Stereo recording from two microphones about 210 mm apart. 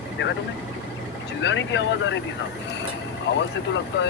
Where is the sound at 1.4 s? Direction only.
60° left (ahead or behind).